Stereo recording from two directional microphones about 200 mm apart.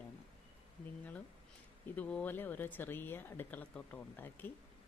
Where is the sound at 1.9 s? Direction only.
5° left (ahead or behind).